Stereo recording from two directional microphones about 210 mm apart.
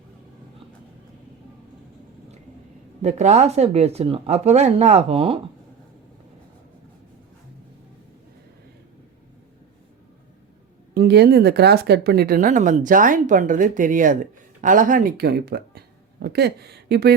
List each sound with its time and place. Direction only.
3.0 s speech: 30° right (ahead or behind)
10.9 s speech: 50° right (ahead or behind)